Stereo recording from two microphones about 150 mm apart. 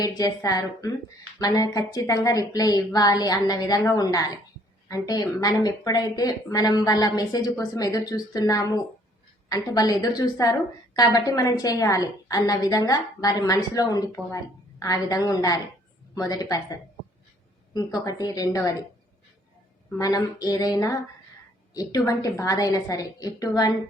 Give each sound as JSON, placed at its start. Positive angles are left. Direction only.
{"t": 0.2, "sound": "a woman's voice", "side_deg": 25}
{"t": 17.7, "sound": "a woman's voice", "side_deg": 25}
{"t": 20.0, "sound": "a woman's voice", "side_deg": 25}